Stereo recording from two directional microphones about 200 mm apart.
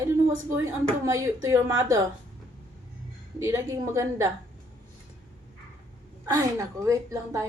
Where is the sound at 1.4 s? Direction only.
15° right (ahead or behind).